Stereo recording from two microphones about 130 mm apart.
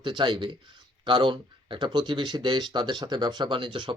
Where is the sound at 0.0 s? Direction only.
35° right (ahead or behind).